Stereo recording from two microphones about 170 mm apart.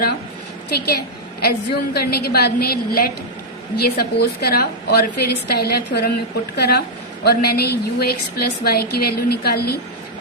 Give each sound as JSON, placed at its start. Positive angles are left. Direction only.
{"t": 0.7, "sound": "a woman's voice", "side_deg": 65}